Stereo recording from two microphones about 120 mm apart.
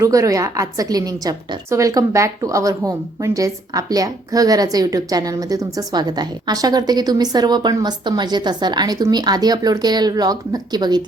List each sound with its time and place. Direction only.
0.0 s a woman's voice: 25° right (ahead or behind)